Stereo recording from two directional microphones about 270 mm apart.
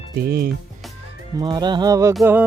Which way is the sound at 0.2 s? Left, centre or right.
Right.